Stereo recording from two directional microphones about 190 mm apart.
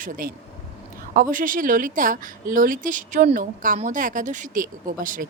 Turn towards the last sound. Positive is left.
turn(degrees=-45)  # may be behind; listen again after turning